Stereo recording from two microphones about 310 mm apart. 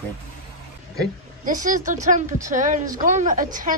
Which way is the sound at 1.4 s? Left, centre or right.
Right.